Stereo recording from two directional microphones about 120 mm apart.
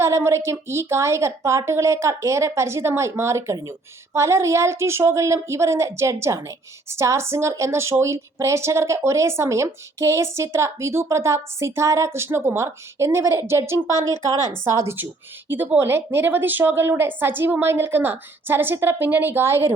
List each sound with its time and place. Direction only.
0.0 s a woman's voice: 25° right (ahead or behind)
14.1 s a woman's voice: 30° left (ahead or behind)
14.7 s speech: 25° right (ahead or behind)